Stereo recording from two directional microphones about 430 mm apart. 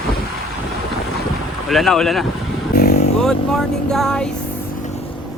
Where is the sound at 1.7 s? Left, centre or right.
Centre.